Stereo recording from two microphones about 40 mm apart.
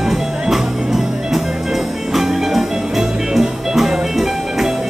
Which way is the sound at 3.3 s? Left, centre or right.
Centre.